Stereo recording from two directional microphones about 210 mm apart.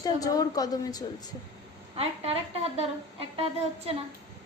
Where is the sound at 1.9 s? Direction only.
30° right (ahead or behind).